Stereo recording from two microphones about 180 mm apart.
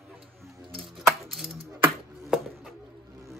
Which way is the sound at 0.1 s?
10° right (ahead or behind).